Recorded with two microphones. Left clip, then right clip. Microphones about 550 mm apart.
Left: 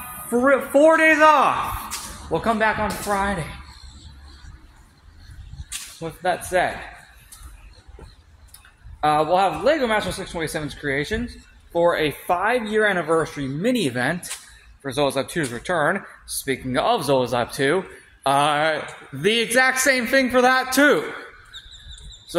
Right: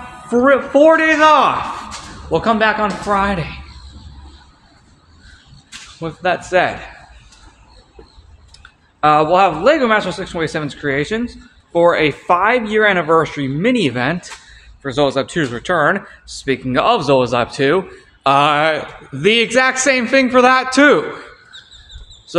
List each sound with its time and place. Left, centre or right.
0.3 s speech: left
5.7 s speech: left
9.0 s speech: left